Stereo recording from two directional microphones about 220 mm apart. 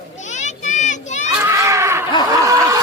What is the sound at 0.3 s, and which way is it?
Children playing, 35° left (ahead or behind).